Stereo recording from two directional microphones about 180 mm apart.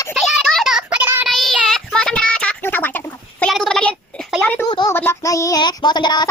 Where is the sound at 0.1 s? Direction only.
Centre (ahead or behind).